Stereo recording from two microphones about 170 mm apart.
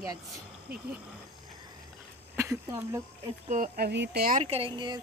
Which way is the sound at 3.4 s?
45° right (ahead or behind).